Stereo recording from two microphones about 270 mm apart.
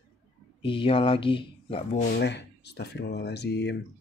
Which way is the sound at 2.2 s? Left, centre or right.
Left.